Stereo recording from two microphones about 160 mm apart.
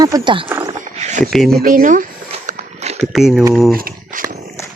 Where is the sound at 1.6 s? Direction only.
55° right (ahead or behind).